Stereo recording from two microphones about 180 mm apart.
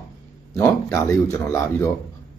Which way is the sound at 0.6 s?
15° left (ahead or behind).